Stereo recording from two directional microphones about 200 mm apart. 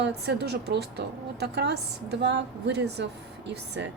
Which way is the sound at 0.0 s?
55° right (ahead or behind).